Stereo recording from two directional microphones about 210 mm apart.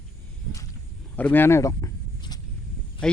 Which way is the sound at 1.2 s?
10° left (ahead or behind).